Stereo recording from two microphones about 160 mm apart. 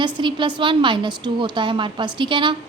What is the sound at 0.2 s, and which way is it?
A woman's voice, 30° right (ahead or behind).